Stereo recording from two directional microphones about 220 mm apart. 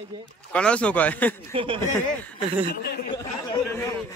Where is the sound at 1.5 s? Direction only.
25° right (ahead or behind).